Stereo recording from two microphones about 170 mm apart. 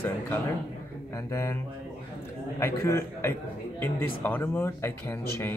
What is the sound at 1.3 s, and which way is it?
Speech, 20° left (ahead or behind).